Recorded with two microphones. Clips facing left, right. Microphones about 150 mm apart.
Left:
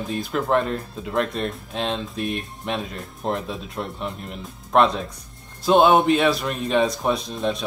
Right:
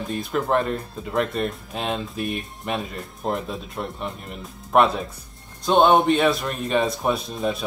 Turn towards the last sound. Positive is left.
turn(degrees=-5)  # may be behind; listen again after turning